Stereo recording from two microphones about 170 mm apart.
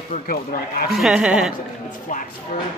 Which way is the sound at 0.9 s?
Centre (ahead or behind).